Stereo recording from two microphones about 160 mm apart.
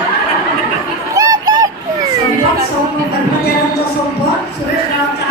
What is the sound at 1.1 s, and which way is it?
Fowl, 25° right (ahead or behind).